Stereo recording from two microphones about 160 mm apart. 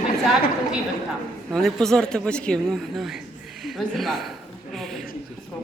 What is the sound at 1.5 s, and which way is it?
Speech, 5° left (ahead or behind).